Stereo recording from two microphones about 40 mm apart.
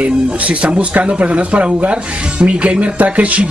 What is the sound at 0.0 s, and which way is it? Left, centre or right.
Speech, right.